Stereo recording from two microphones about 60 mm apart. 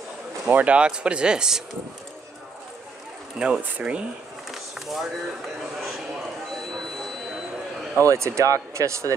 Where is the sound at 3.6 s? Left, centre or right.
Right.